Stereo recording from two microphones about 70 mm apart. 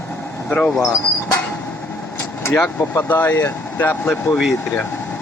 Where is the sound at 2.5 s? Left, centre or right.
Left.